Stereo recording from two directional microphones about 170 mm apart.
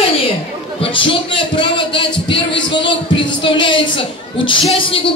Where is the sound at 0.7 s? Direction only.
30° left (ahead or behind).